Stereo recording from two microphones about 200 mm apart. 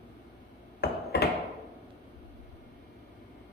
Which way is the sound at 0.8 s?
55° left (ahead or behind).